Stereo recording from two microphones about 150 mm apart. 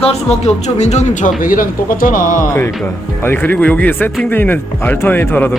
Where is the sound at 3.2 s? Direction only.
15° left (ahead or behind).